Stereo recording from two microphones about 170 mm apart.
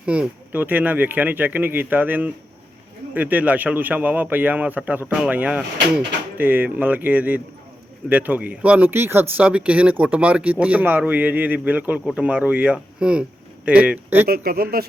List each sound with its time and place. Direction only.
0.0 s speech: 5° right (ahead or behind)
14.3 s speech: 65° right (ahead or behind)